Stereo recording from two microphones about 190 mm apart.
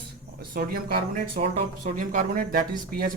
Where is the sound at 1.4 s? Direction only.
40° right (ahead or behind).